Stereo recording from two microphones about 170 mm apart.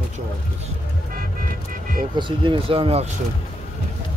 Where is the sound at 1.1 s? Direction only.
60° right (ahead or behind).